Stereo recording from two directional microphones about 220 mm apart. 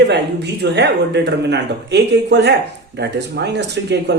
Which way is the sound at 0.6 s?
50° right (ahead or behind).